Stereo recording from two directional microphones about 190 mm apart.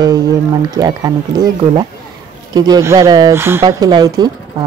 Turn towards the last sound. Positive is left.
turn(degrees=-20)  # may be behind; listen again after turning